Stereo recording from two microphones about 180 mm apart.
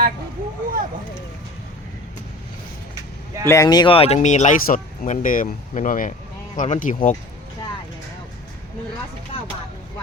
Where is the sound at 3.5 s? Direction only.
20° left (ahead or behind); by 7.1 s 45° left (ahead or behind).